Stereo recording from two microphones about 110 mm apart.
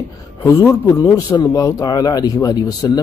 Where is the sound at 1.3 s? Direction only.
40° left (ahead or behind).